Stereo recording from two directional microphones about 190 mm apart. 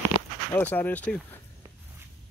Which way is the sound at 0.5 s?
10° left (ahead or behind).